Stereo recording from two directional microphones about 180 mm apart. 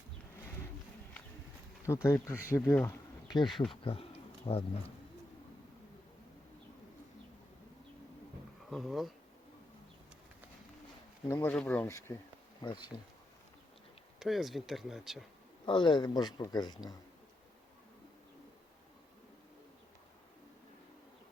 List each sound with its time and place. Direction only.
1.9 s speech: 15° left (ahead or behind)
3.5 s speech: centre (ahead or behind)
3.8 s a sound: 30° left (ahead or behind)
8.7 s speech: centre (ahead or behind)
11.3 s speech: 10° left (ahead or behind)
12.6 s speech: 25° left (ahead or behind)
14.2 s speech: centre (ahead or behind)
15.6 s speech: 25° left (ahead or behind)